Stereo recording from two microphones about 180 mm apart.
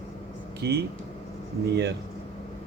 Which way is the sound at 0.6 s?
60° right (ahead or behind).